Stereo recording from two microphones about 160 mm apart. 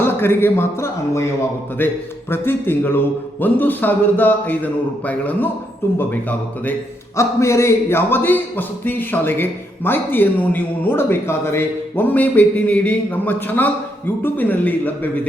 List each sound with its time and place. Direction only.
0.0 s speech: 15° left (ahead or behind)